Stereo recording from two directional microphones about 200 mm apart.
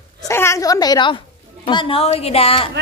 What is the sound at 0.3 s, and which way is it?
A woman's voice, 15° left (ahead or behind).